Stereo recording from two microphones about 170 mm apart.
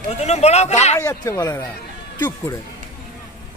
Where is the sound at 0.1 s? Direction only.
40° left (ahead or behind).